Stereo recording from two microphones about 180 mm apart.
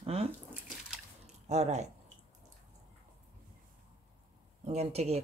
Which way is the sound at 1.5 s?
40° right (ahead or behind).